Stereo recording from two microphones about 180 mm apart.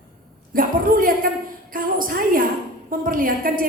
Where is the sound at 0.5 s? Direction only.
50° right (ahead or behind).